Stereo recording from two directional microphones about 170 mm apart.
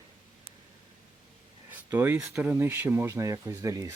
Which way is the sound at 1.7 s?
10° right (ahead or behind).